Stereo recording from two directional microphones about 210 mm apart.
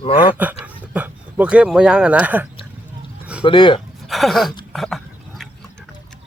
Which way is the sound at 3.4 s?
25° left (ahead or behind).